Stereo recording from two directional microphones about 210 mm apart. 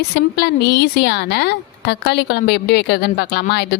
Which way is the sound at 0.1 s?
50° left (ahead or behind).